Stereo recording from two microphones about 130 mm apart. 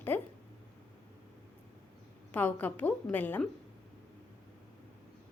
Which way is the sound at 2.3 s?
15° left (ahead or behind).